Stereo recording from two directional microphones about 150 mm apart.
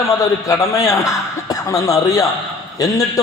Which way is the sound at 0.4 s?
20° left (ahead or behind).